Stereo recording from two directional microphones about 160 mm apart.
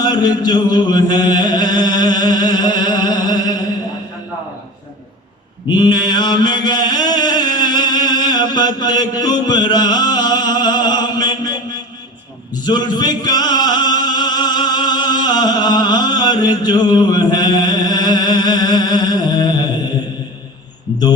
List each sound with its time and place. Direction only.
0.0 s a sound: 25° left (ahead or behind)
5.6 s mantra: 25° left (ahead or behind)
12.6 s music: 25° left (ahead or behind)